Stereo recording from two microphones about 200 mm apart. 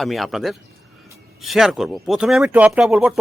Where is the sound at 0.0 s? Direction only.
Centre (ahead or behind).